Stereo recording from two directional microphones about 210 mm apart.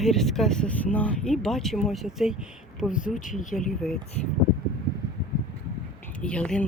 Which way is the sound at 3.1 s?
40° left (ahead or behind).